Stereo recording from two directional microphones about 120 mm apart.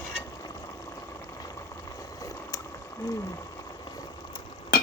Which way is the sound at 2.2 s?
30° left (ahead or behind).